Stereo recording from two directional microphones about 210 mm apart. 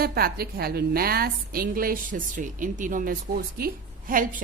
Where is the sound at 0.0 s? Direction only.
45° right (ahead or behind).